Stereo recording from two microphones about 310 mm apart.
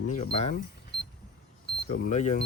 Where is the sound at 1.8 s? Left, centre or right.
Left.